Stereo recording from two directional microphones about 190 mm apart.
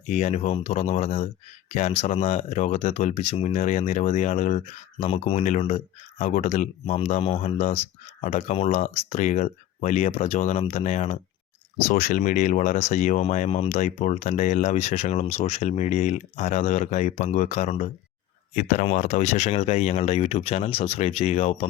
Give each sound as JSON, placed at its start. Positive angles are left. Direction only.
{"t": 0.1, "sound": "speech", "side_deg": 40}